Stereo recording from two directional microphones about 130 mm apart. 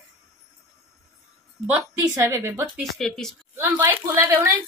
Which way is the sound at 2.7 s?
Centre (ahead or behind).